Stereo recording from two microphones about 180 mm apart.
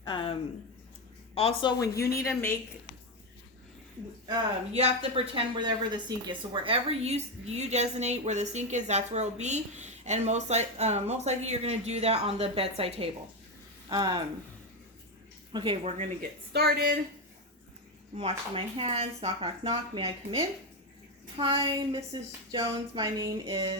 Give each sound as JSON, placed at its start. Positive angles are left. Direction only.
{"t": 0.0, "sound": "a sound", "side_deg": 25}
{"t": 1.4, "sound": "speech", "side_deg": 35}
{"t": 2.1, "sound": "speech", "side_deg": 15}
{"t": 4.7, "sound": "a woman's voice", "side_deg": -35}
{"t": 13.9, "sound": "a woman's voice", "side_deg": -20}
{"t": 15.5, "sound": "a woman's voice", "side_deg": -30}
{"t": 16.5, "sound": "speech", "side_deg": -60}
{"t": 18.2, "sound": "a woman's voice", "side_deg": -35}